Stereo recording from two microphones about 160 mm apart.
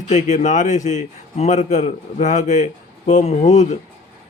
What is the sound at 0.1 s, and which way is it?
Speech, 50° left (ahead or behind).